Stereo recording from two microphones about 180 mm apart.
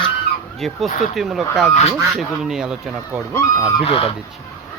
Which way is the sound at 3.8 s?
30° left (ahead or behind).